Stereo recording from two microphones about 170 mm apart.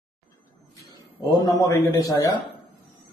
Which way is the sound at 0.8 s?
25° left (ahead or behind).